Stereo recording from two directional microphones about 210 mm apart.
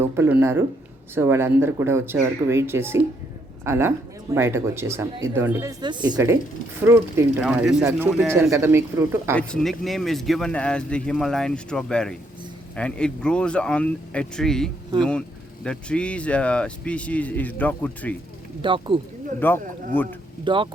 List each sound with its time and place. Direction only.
0.0 s speech: 10° right (ahead or behind)
9.3 s speech: 5° left (ahead or behind)
18.6 s speech: 25° right (ahead or behind)
19.4 s speech: 10° left (ahead or behind)
20.4 s speech: 25° right (ahead or behind)